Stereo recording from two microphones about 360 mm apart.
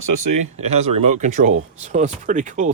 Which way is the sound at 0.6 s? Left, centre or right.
Centre.